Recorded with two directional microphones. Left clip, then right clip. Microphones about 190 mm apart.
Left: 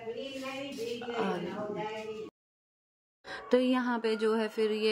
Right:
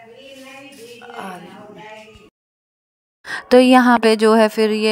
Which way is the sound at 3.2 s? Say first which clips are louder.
Right 16 dB; 55° right (ahead or behind).